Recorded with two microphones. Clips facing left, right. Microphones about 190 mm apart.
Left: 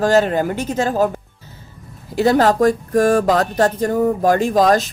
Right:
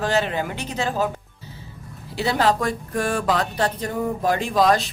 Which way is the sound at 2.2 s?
45° left (ahead or behind).